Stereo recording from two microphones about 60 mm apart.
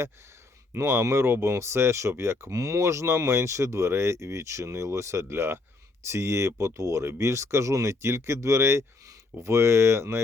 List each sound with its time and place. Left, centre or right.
0.7 s speech: right
2.6 s speech: right